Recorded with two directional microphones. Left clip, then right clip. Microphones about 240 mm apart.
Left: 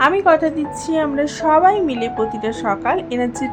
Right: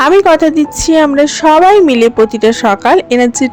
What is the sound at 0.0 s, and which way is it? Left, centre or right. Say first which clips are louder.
A woman's voice: right 7 dB; right.